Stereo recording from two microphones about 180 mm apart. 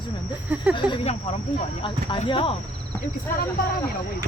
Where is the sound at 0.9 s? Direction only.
35° left (ahead or behind).